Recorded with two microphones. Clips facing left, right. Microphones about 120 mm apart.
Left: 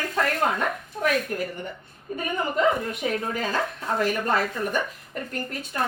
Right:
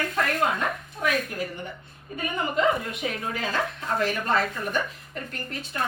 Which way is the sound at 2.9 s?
45° left (ahead or behind).